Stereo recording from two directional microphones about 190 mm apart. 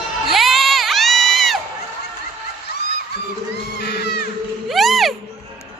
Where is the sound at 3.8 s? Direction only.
60° left (ahead or behind).